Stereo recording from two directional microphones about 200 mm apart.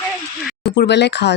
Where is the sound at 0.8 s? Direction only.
60° left (ahead or behind).